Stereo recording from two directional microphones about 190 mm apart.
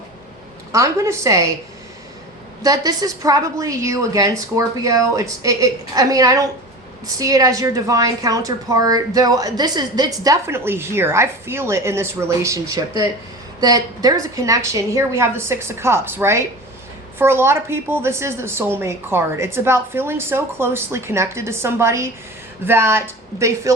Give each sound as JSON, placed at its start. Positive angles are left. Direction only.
{"t": 0.7, "sound": "a woman's voice", "side_deg": -15}
{"t": 2.6, "sound": "a woman's voice", "side_deg": -20}